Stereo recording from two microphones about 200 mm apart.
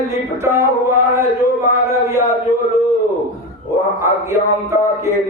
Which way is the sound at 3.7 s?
15° right (ahead or behind).